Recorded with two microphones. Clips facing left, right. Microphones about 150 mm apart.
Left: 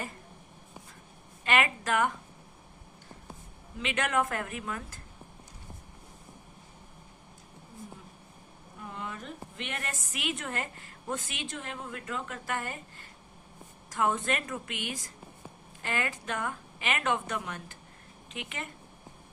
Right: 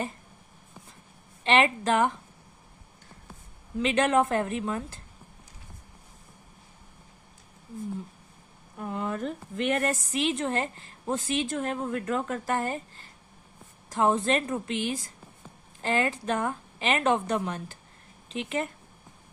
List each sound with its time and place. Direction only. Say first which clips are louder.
1.5 s a woman's voice: right 5 dB; 30° right (ahead or behind)
3.8 s a woman's voice: right 7 dB; 35° right (ahead or behind)
8.8 s speech: right 9 dB; 50° right (ahead or behind)
10.1 s a woman's voice: right 8 dB; 30° right (ahead or behind)